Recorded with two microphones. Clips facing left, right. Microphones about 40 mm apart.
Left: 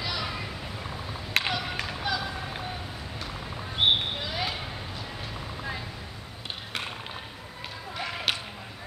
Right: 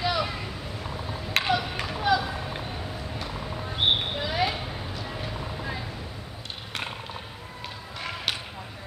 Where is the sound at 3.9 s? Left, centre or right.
Centre.